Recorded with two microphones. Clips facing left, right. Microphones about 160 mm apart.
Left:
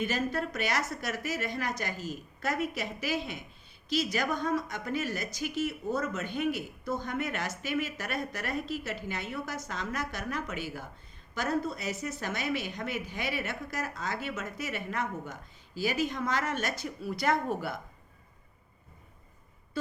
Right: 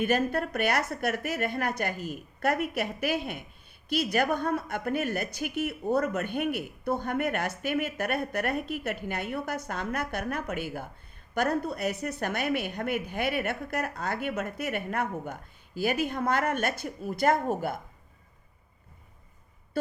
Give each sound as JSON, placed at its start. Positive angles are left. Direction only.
{"t": 0.0, "sound": "a woman's voice", "side_deg": -55}